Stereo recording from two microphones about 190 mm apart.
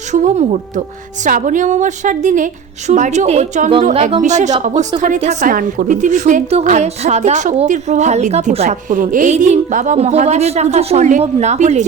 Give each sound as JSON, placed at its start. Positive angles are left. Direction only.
{"t": 0.1, "sound": "a woman's voice", "side_deg": -40}